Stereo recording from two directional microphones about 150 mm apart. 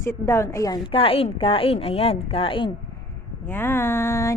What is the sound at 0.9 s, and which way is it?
Speech, 40° left (ahead or behind).